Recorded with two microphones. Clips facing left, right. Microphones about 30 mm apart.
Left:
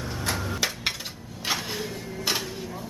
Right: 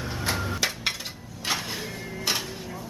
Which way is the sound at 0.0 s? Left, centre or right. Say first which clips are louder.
Right 1 dB; centre.